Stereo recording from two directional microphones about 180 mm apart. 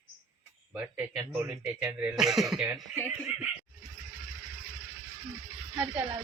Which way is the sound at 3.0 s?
10° right (ahead or behind).